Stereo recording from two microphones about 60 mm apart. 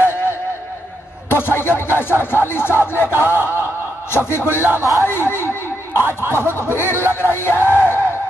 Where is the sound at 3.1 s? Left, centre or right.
Right.